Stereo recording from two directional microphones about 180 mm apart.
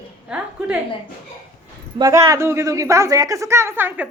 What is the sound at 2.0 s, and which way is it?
A woman's voice, 15° right (ahead or behind).